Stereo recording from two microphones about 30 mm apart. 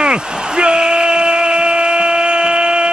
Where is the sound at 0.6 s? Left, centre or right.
Right.